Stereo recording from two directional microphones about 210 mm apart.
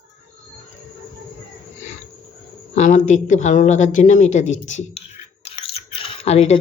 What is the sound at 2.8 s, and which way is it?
Speech, 35° left (ahead or behind).